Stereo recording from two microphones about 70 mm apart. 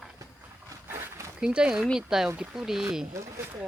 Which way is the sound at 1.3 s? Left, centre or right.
Centre.